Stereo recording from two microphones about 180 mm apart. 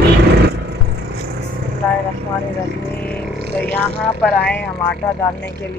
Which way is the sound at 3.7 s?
5° left (ahead or behind).